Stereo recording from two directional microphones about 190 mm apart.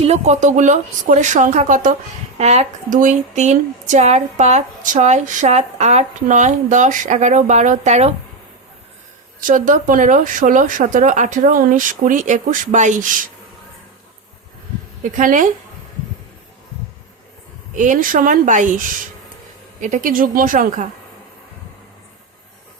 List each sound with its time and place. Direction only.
0.0 s speech: 35° right (ahead or behind)
9.4 s speech: 45° right (ahead or behind)
15.1 s speech: 45° right (ahead or behind)
17.7 s speech: 45° right (ahead or behind)
19.8 s speech: 45° right (ahead or behind)